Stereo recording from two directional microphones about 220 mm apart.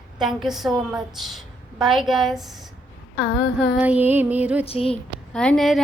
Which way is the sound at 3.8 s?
5° right (ahead or behind).